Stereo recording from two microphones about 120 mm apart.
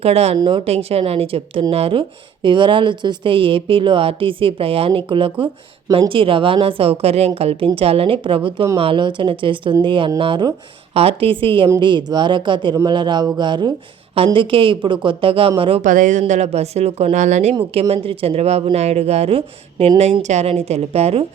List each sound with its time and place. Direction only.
0.0 s speech: 55° right (ahead or behind)
0.3 s speech: 45° right (ahead or behind)
15.8 s a woman's voice: 90° right
17.7 s speech: 55° right (ahead or behind)